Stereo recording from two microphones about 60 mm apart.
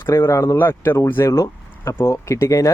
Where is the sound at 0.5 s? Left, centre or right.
Left.